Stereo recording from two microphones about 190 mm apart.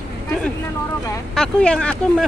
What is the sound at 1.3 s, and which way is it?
Speech, 5° left (ahead or behind).